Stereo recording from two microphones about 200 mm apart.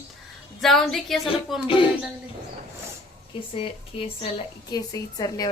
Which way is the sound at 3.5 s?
30° left (ahead or behind).